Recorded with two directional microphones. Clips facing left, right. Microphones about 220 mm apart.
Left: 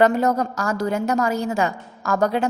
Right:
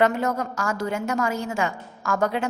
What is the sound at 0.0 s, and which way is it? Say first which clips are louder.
A woman's voice: left 4 dB; 35° left (ahead or behind).